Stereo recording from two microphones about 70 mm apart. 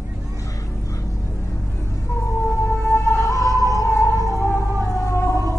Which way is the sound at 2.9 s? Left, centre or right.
Left.